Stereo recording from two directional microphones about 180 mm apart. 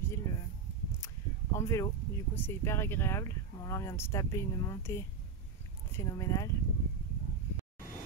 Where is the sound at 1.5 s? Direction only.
15° left (ahead or behind).